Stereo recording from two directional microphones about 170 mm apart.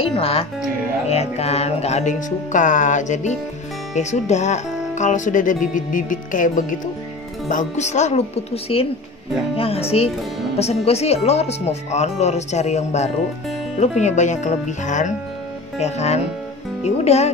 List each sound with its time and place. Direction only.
0.0 s speech: 35° left (ahead or behind)